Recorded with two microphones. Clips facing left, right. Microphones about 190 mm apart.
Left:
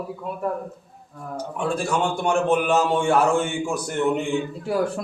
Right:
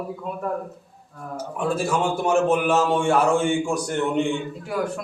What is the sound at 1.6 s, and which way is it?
A man's voice, 5° right (ahead or behind).